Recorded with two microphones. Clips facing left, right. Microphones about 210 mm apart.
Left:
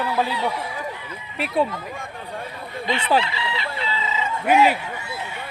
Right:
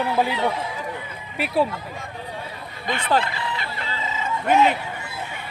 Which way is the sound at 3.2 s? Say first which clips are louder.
Left 1 dB; 50° right (ahead or behind).